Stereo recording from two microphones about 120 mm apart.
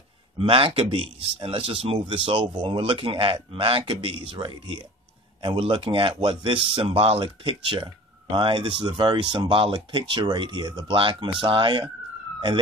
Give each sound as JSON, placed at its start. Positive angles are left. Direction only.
{"t": 0.4, "sound": "speech", "side_deg": -50}